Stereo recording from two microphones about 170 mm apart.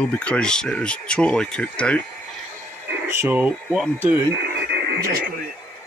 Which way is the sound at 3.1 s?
15° right (ahead or behind).